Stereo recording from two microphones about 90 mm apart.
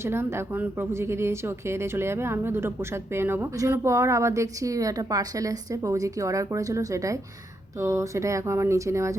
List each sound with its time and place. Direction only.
0.0 s a woman's voice: 30° right (ahead or behind)